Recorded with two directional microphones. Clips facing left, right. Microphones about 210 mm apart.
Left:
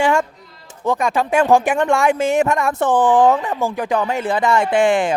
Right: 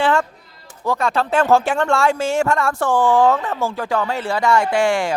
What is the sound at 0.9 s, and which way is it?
Speech, 15° left (ahead or behind).